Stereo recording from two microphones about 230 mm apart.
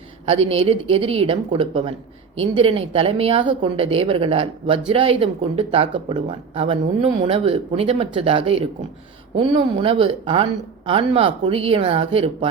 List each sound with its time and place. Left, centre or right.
0.3 s speech: right